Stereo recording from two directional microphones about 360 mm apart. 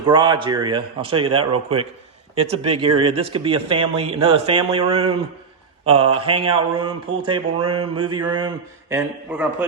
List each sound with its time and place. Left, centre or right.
0.0 s speech: centre